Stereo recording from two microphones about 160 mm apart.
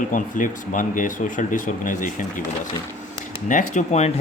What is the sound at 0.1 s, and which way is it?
Speech, 55° left (ahead or behind).